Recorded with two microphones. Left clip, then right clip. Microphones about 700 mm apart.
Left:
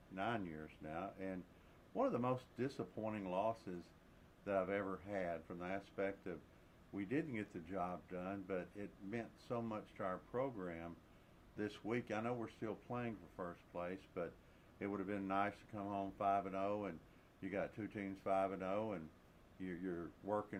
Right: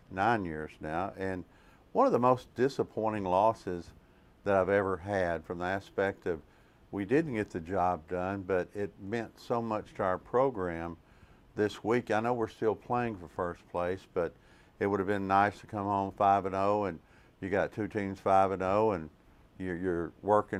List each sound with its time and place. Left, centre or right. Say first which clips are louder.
0.1 s speech: right 14 dB; right